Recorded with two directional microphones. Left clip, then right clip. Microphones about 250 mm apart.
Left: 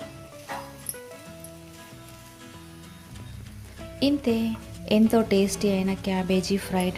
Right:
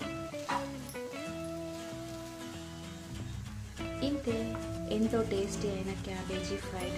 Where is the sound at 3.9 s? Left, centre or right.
Left.